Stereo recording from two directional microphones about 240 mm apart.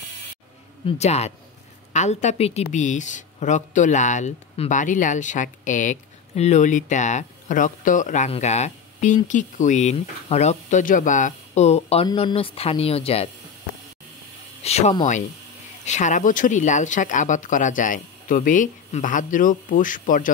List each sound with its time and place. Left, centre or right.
0.8 s speech: left
14.6 s speech: left